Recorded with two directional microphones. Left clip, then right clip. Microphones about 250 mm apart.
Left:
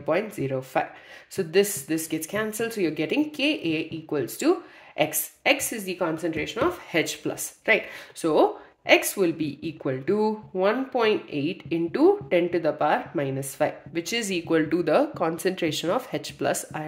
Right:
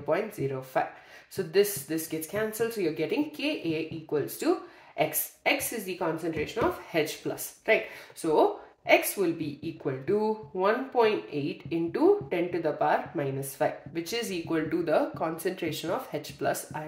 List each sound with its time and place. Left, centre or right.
0.0 s a woman's voice: left